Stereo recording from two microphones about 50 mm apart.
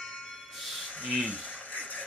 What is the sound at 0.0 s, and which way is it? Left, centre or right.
Music, left.